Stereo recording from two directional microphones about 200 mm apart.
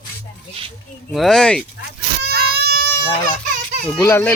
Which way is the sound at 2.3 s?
50° right (ahead or behind).